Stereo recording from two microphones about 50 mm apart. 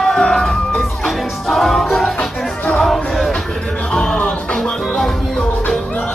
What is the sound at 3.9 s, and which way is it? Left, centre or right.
Music, centre.